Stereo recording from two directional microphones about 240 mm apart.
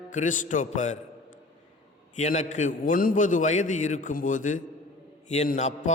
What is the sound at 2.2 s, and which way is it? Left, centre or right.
A man's voice, left.